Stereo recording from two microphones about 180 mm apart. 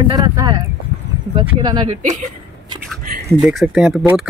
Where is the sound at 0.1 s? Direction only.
20° right (ahead or behind).